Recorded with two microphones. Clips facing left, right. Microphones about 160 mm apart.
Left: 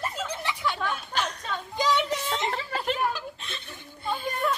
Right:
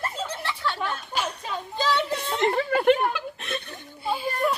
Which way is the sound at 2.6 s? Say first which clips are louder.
Right 8 dB; 55° right (ahead or behind).